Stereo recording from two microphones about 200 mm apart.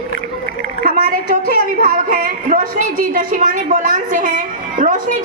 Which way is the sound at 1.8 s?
45° right (ahead or behind).